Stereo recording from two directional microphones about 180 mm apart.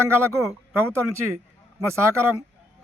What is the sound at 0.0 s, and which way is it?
A man's voice, 15° right (ahead or behind).